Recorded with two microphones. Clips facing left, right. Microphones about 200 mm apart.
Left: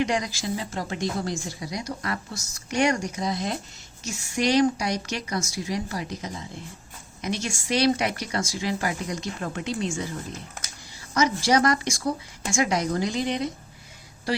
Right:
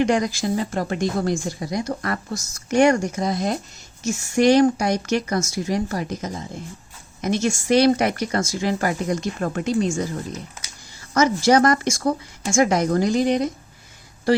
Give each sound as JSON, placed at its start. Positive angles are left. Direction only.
{"t": 0.0, "sound": "speech", "side_deg": -50}